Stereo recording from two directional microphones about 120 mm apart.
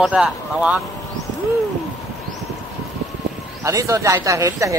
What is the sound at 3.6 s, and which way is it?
Speech, 25° right (ahead or behind).